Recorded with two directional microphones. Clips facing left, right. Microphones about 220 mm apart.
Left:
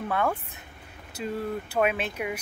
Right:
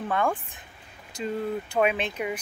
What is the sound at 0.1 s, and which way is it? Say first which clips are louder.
Speech: right 1 dB; 5° left (ahead or behind).